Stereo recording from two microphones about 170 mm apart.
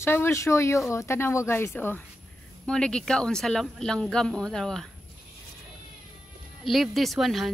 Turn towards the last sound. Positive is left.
turn(degrees=0)  # may be behind; listen again after turning